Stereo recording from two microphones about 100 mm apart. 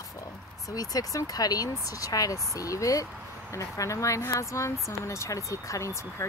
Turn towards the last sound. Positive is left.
turn(degrees=30)  # may be behind; listen again after turning